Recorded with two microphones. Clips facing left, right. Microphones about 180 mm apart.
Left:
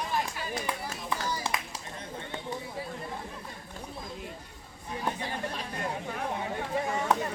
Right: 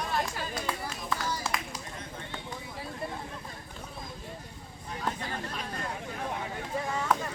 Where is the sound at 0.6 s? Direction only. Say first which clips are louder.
Even; 15° left (ahead or behind).